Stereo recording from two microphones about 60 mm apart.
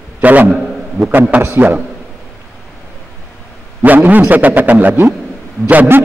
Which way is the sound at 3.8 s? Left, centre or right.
Right.